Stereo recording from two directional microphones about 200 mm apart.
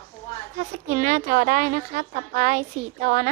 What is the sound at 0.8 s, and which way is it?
A woman's voice, 40° right (ahead or behind).